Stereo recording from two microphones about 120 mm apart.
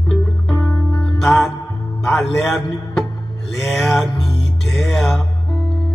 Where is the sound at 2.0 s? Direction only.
5° left (ahead or behind).